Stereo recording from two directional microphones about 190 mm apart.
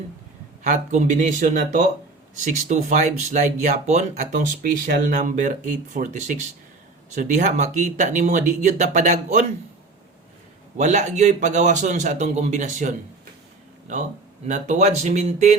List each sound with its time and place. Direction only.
0.6 s speech: 40° right (ahead or behind)
10.8 s speech: 40° right (ahead or behind)
14.4 s speech: 40° right (ahead or behind)